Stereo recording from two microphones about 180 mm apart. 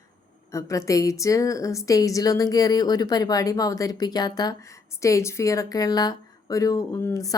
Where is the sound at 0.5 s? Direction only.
15° left (ahead or behind).